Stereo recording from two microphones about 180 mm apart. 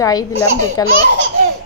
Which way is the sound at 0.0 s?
20° left (ahead or behind).